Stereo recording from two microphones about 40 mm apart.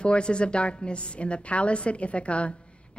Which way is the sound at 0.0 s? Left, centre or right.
Left.